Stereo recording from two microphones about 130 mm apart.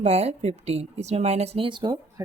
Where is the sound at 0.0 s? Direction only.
55° right (ahead or behind).